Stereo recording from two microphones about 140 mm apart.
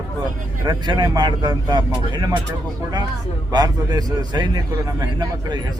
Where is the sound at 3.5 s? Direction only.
30° right (ahead or behind).